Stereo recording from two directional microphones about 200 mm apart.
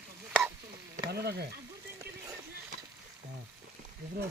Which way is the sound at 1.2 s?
55° right (ahead or behind).